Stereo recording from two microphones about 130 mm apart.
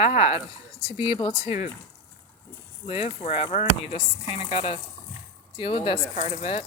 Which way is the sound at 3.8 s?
45° left (ahead or behind).